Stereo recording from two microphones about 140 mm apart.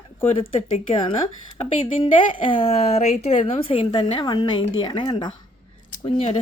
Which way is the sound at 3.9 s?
35° left (ahead or behind).